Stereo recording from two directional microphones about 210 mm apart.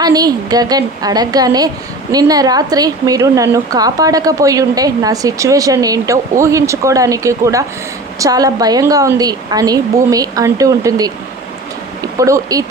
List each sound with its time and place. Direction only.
0.0 s a woman's voice: 20° right (ahead or behind)
12.2 s a woman's voice: 15° right (ahead or behind)